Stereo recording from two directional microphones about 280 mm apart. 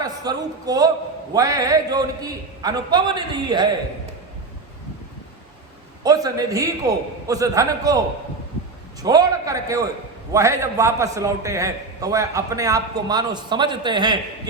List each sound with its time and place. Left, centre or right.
0.0 s a man's voice: centre
6.0 s a man's voice: centre
9.0 s a man's voice: centre